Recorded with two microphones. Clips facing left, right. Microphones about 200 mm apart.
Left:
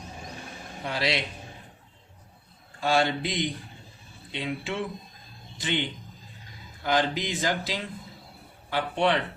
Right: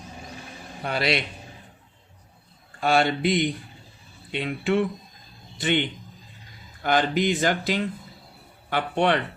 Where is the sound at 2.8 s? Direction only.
60° right (ahead or behind).